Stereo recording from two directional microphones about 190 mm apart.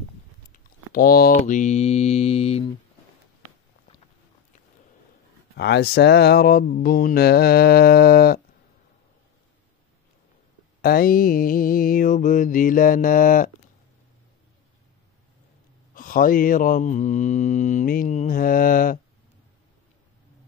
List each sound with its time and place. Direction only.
0.5 s a sound: 50° left (ahead or behind)
1.4 s mantra: 40° left (ahead or behind)
5.6 s mantra: 60° left (ahead or behind)
10.8 s mantra: 50° left (ahead or behind)
15.9 s mantra: 45° left (ahead or behind)